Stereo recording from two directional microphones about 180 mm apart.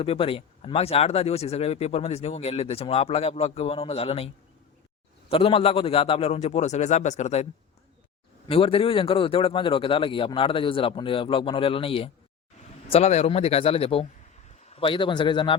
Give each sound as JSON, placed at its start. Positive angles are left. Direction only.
{"t": 0.0, "sound": "speech", "side_deg": 30}
{"t": 5.3, "sound": "speech", "side_deg": 30}
{"t": 8.4, "sound": "a man's voice", "side_deg": 30}